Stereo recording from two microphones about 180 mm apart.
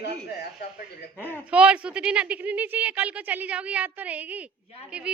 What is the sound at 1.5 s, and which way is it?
A woman's voice, 5° right (ahead or behind).